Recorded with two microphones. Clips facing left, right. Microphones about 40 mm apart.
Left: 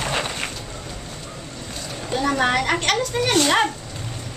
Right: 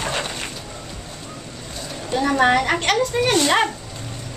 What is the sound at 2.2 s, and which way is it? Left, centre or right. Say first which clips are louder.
Speech: right 3 dB; centre.